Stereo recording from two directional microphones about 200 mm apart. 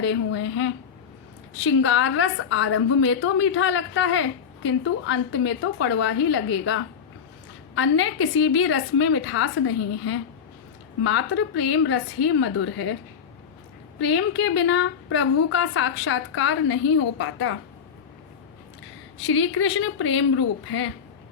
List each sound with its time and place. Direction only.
0.0 s a woman's voice: 80° left
7.8 s a woman's voice: 80° left
14.0 s a woman's voice: 70° left (ahead or behind)
19.2 s a woman's voice: 70° left (ahead or behind); by 20.9 s 90° left